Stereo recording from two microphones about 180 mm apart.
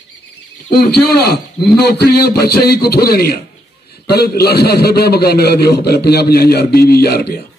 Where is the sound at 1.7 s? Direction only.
65° left (ahead or behind).